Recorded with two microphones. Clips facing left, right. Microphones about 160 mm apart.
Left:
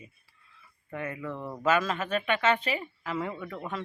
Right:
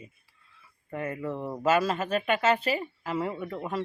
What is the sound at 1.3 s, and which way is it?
Speech, 15° right (ahead or behind).